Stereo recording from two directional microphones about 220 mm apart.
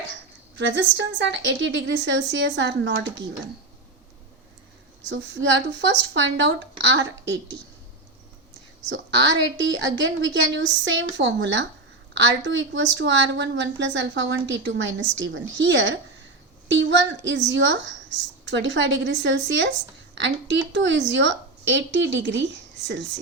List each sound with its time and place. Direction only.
0.5 s a woman's voice: 55° right (ahead or behind)
5.0 s a woman's voice: 55° right (ahead or behind)
8.9 s a woman's voice: 55° right (ahead or behind)